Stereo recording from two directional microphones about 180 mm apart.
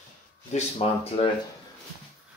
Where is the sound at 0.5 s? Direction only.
35° left (ahead or behind).